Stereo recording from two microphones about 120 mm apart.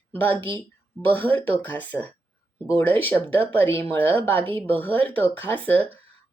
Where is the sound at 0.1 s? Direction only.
15° left (ahead or behind).